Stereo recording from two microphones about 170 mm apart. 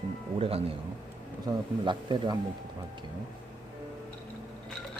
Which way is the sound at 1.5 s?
25° right (ahead or behind).